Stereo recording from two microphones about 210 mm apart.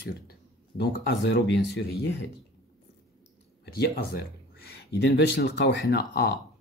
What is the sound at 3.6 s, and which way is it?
Speech, 45° left (ahead or behind).